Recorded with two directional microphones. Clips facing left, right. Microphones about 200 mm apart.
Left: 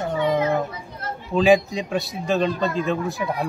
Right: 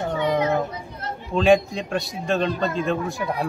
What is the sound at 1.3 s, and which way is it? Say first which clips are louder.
A man's voice: left 1 dB; centre (ahead or behind).